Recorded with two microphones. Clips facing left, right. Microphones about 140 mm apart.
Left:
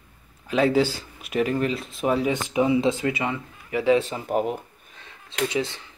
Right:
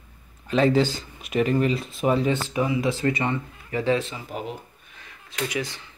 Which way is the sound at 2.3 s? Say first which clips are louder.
Left 2 dB; 20° left (ahead or behind).